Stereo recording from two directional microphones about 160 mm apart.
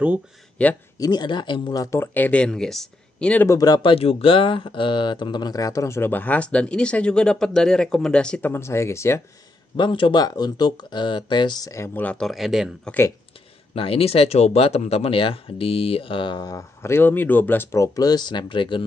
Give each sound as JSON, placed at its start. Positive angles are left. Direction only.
{"t": 0.6, "sound": "speech", "side_deg": 10}
{"t": 0.9, "sound": "speech", "side_deg": 25}
{"t": 3.5, "sound": "speech", "side_deg": 25}
{"t": 9.8, "sound": "speech", "side_deg": 30}
{"t": 13.7, "sound": "speech", "side_deg": 35}